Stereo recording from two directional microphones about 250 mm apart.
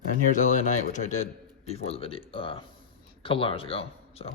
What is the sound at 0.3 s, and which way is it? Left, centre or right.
A man's voice, left.